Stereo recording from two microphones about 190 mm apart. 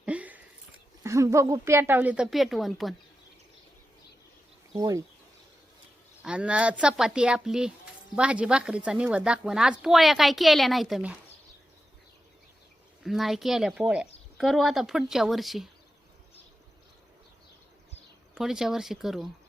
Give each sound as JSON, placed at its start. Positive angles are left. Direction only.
{"t": 0.0, "sound": "a sound", "side_deg": -5}
{"t": 1.0, "sound": "a woman's voice", "side_deg": -15}
{"t": 4.8, "sound": "a woman's voice", "side_deg": -20}
{"t": 6.2, "sound": "speech", "side_deg": -5}
{"t": 13.0, "sound": "speech", "side_deg": 0}
{"t": 18.3, "sound": "speech", "side_deg": 0}